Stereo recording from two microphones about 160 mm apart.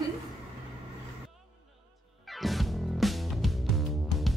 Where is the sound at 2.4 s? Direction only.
Centre (ahead or behind).